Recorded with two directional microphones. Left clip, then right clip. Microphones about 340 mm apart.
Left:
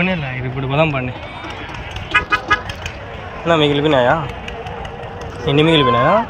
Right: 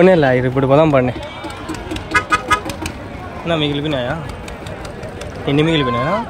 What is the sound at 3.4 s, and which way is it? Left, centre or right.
Speech, centre.